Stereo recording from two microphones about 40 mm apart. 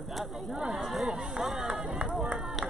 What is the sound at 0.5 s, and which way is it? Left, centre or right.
Chatter, right.